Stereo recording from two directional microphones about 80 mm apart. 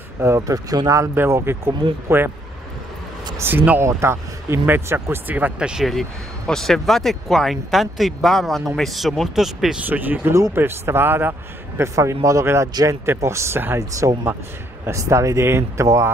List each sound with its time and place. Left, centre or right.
0.2 s speech: right
0.7 s speech: right
1.1 s speech: right
3.3 s speech: right
3.8 s speech: right; by 5.9 s centre
5.9 s speech: centre
9.8 s speech: right
10.2 s speech: right
11.8 s speech: right
13.7 s speech: right